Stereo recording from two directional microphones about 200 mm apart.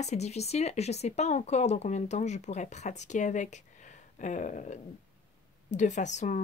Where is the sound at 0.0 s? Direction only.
35° left (ahead or behind).